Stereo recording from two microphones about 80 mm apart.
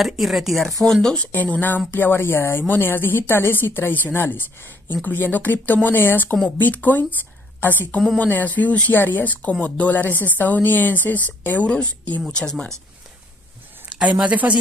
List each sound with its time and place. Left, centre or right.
0.0 s speech: centre
1.2 s speech: centre
8.2 s speech: left
13.8 s speech: centre